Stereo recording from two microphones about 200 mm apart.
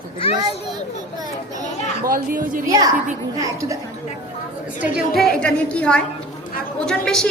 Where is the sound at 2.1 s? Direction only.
40° right (ahead or behind).